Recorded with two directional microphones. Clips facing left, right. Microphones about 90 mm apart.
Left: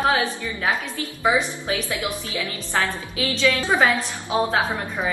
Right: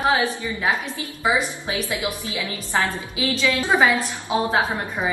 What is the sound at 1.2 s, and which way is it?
A woman's voice, 15° right (ahead or behind).